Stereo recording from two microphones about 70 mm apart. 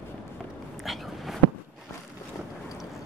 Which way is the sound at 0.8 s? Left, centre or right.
Centre.